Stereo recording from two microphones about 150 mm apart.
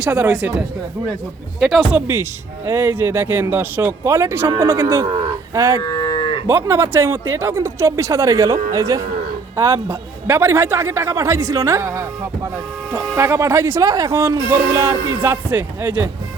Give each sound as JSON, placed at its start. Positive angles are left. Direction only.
{"t": 0.0, "sound": "speech", "side_deg": -10}
{"t": 1.5, "sound": "a man's voice", "side_deg": 0}
{"t": 5.8, "sound": "moo", "side_deg": 25}
{"t": 6.5, "sound": "a man's voice", "side_deg": -15}